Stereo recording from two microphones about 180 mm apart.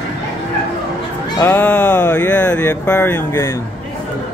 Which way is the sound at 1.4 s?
10° left (ahead or behind).